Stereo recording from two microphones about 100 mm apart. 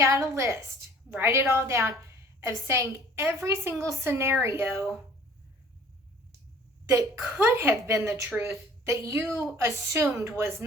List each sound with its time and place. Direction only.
0.0 s a woman's voice: 30° right (ahead or behind)
6.9 s a woman's voice: 25° right (ahead or behind)